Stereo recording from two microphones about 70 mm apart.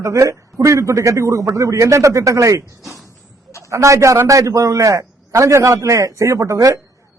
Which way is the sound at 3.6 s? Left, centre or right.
Right.